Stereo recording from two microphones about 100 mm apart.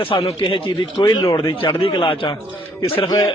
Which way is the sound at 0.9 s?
35° left (ahead or behind).